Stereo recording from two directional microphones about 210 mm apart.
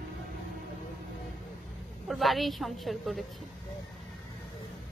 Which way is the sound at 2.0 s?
Centre (ahead or behind).